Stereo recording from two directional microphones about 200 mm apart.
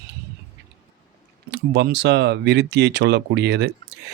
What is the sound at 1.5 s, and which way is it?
Speech, 60° right (ahead or behind).